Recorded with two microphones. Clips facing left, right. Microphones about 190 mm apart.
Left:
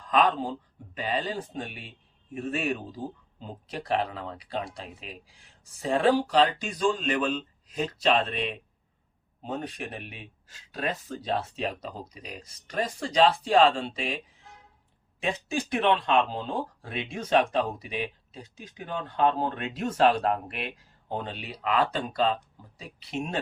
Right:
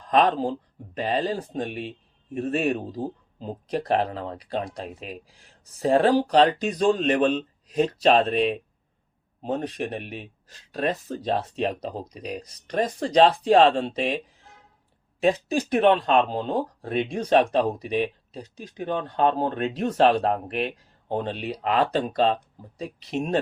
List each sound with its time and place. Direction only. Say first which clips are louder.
0.1 s speech: right 4 dB; 35° right (ahead or behind)
15.2 s speech: right 8 dB; 40° right (ahead or behind)